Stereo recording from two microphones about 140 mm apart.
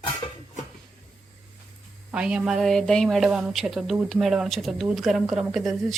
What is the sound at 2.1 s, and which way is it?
Speech, 5° right (ahead or behind).